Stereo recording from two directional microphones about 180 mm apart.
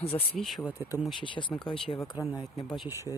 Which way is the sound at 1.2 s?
25° left (ahead or behind).